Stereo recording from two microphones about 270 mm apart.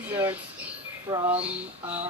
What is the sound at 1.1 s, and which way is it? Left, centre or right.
Speech, centre.